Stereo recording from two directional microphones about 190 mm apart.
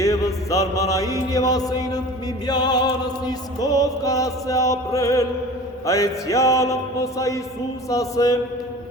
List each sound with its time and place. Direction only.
0.0 s music: 15° left (ahead or behind)